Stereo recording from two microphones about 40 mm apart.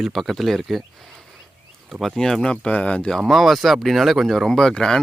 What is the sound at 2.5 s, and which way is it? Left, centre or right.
Speech, left.